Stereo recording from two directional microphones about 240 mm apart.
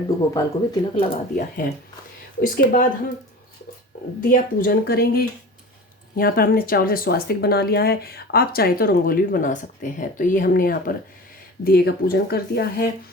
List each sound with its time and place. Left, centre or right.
0.3 s speech: centre
1.1 s speech: left
4.2 s speech: left